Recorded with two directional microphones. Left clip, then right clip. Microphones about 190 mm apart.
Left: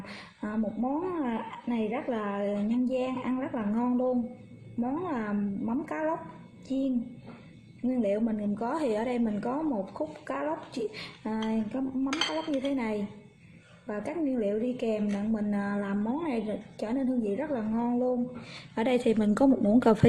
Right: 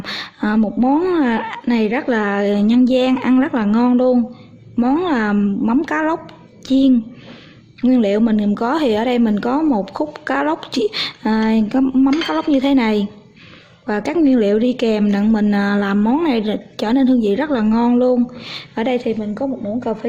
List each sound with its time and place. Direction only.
0.0 s a woman's voice: 45° right (ahead or behind)
7.9 s a woman's voice: 45° right (ahead or behind)
18.7 s a woman's voice: 15° right (ahead or behind)
19.2 s a woman's voice: 25° left (ahead or behind)
19.8 s speech: 35° left (ahead or behind)